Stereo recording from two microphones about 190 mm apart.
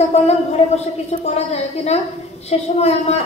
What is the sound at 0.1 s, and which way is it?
A woman's voice, 35° left (ahead or behind).